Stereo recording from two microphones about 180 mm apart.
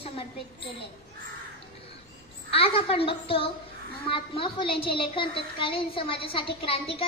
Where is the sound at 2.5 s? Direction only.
30° left (ahead or behind).